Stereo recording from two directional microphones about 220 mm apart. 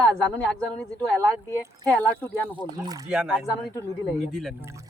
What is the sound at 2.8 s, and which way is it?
Speech, 15° right (ahead or behind).